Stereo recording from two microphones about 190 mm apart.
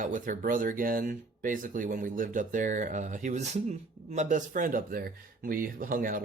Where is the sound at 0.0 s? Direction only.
45° right (ahead or behind).